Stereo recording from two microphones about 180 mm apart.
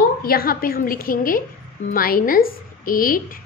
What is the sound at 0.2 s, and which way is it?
A woman's voice, 55° left (ahead or behind).